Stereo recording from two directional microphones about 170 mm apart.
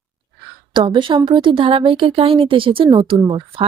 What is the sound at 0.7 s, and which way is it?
Speech, 30° right (ahead or behind).